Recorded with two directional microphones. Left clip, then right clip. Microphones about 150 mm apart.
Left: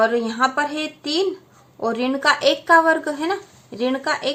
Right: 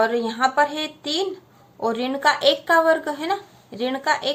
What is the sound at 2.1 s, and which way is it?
A woman's voice, 35° left (ahead or behind).